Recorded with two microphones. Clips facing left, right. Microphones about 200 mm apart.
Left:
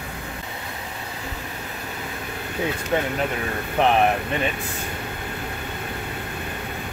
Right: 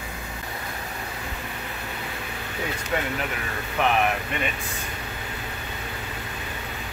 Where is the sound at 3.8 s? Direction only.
35° left (ahead or behind).